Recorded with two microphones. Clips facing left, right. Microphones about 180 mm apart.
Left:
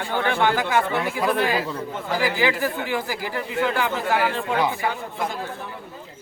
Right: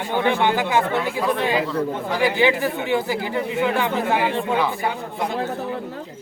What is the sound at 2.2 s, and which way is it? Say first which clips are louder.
Speech: right 4 dB; 25° right (ahead or behind).